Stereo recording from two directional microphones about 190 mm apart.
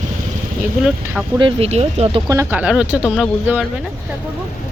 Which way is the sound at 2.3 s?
10° right (ahead or behind).